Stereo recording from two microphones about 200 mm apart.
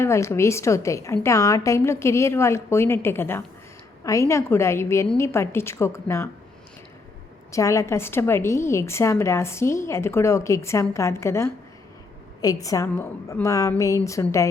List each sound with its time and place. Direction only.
0.0 s a woman's voice: 15° left (ahead or behind)
7.5 s a woman's voice: 15° left (ahead or behind)